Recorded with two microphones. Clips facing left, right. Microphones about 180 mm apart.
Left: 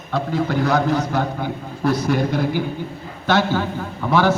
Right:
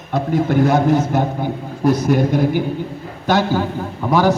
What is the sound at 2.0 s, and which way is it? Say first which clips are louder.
A man's voice: right 4 dB; 45° right (ahead or behind).